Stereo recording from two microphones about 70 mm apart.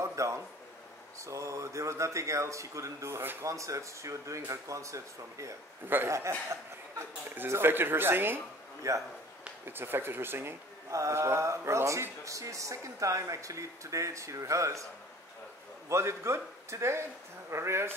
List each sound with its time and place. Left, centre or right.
0.0 s a sound: right
1.2 s speech: right
3.4 s speech: right
7.3 s a man's voice: right
8.8 s speech: right
9.7 s a man's voice: right
10.9 s speech: right
15.9 s a man's voice: right